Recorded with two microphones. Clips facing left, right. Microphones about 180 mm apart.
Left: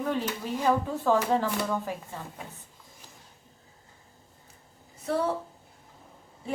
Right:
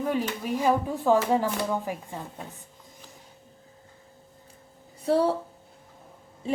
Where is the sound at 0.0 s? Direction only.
10° right (ahead or behind).